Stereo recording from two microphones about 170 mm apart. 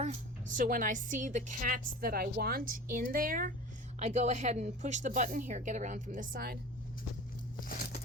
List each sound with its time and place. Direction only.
0.0 s a woman's voice: 45° right (ahead or behind)
4.0 s a woman's voice: 45° right (ahead or behind); by 6.6 s 60° right (ahead or behind)
7.6 s a sound: 55° left (ahead or behind)